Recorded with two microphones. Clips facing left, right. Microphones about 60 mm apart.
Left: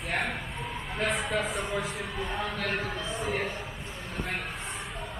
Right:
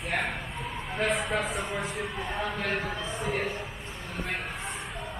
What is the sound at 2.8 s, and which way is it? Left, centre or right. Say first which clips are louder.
Speech: even; centre.